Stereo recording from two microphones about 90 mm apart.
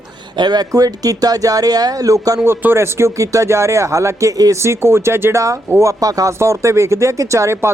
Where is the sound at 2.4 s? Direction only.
25° right (ahead or behind).